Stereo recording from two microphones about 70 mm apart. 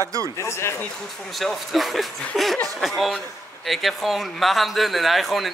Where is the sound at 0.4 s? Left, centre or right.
Left.